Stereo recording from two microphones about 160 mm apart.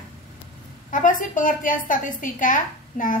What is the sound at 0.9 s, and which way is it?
A woman's voice, 55° left (ahead or behind).